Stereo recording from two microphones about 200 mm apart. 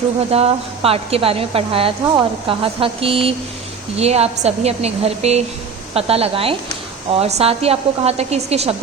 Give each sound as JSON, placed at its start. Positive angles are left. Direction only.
{"t": 0.3, "sound": "a woman's voice", "side_deg": -30}